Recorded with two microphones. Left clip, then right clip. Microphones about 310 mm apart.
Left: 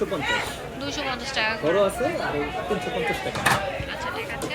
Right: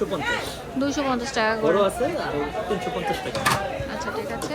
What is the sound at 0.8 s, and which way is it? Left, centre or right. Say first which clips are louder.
Speech: right 5 dB; right.